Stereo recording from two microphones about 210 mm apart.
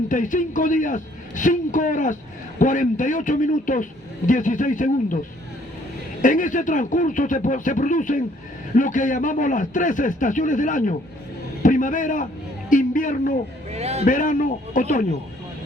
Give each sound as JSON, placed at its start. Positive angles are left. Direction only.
{"t": 0.1, "sound": "a man's voice", "side_deg": 40}
{"t": 6.2, "sound": "a man's voice", "side_deg": 40}
{"t": 13.7, "sound": "a man's voice", "side_deg": -30}
{"t": 14.0, "sound": "a man's voice", "side_deg": 40}